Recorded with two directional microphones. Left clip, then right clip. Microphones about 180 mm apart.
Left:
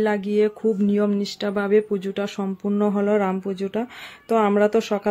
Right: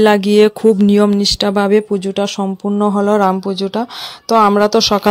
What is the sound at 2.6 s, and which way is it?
Speech, 20° right (ahead or behind).